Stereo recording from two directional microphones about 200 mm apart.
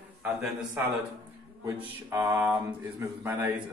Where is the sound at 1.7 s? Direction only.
15° right (ahead or behind).